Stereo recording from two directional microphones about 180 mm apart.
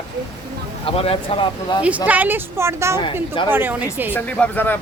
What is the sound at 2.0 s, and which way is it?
A woman's voice, 10° right (ahead or behind).